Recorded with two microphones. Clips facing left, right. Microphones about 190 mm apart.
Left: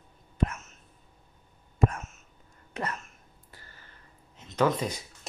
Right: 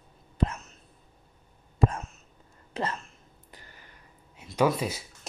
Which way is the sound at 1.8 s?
35° right (ahead or behind).